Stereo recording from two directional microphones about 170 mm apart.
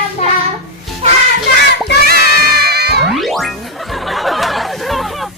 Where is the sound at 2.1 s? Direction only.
65° right (ahead or behind).